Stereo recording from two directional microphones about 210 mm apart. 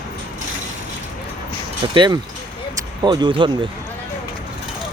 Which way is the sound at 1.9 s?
20° right (ahead or behind).